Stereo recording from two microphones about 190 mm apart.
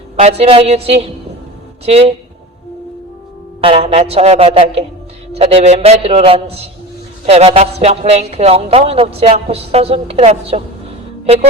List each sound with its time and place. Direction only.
0.2 s speech: 35° right (ahead or behind)
3.6 s speech: 30° right (ahead or behind)